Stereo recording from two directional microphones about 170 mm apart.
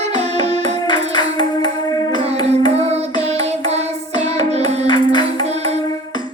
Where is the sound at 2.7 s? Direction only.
40° right (ahead or behind).